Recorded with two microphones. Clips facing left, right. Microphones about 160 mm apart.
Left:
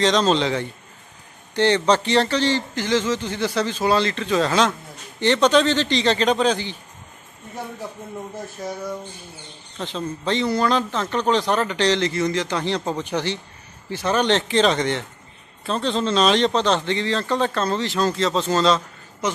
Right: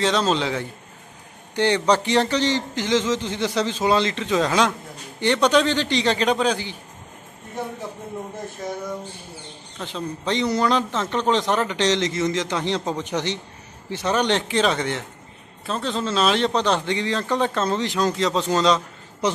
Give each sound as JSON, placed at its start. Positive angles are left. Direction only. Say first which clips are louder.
{"t": 0.0, "sound": "a man's voice", "louder": "left 2 dB", "side_deg": -10}
{"t": 8.6, "sound": "a sound", "louder": "even", "side_deg": 0}
{"t": 9.8, "sound": "a man's voice", "louder": "left 1 dB", "side_deg": -15}